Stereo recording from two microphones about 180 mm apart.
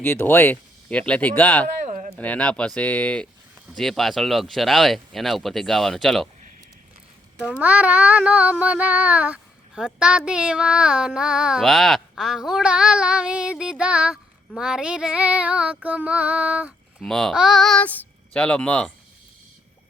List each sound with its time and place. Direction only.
0.0 s speech: 10° left (ahead or behind)
1.8 s a sound: 45° right (ahead or behind)
2.1 s speech: 10° left (ahead or behind)
3.8 s child singing: centre (ahead or behind)
7.4 s child singing: 10° right (ahead or behind)